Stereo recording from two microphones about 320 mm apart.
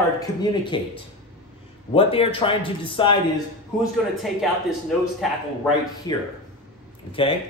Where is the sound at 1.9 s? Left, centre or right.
Centre.